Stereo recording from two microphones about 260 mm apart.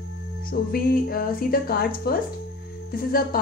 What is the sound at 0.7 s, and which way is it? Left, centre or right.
A woman's voice, left.